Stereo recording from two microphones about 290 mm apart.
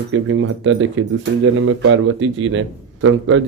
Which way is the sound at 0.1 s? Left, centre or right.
Right.